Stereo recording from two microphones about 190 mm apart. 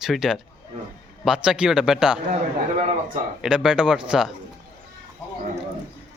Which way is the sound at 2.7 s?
40° right (ahead or behind).